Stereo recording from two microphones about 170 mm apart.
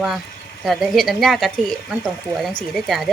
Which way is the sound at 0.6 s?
Centre (ahead or behind).